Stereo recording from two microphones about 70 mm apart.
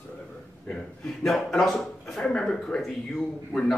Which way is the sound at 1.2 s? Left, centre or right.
Centre.